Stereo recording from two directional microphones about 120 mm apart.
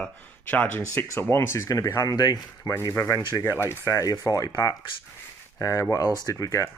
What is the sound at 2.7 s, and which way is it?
Speech, 25° left (ahead or behind).